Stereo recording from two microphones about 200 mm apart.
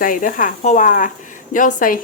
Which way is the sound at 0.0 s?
45° left (ahead or behind).